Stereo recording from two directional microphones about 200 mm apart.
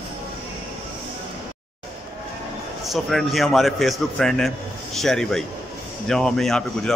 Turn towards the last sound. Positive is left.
turn(degrees=5)  # may be behind; listen again after turning